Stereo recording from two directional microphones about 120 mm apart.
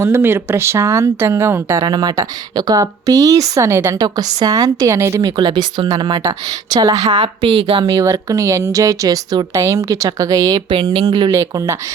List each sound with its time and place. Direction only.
0.0 s speech: 20° right (ahead or behind)
1.8 s a woman's voice: 35° right (ahead or behind)
6.9 s a woman's voice: 70° right (ahead or behind)
7.8 s speech: 30° right (ahead or behind)
10.7 s speech: 45° right (ahead or behind)
11.3 s speech: 25° right (ahead or behind)